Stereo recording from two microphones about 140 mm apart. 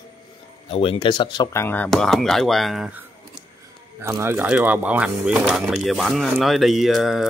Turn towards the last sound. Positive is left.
turn(degrees=0)  # may be behind; listen again after turning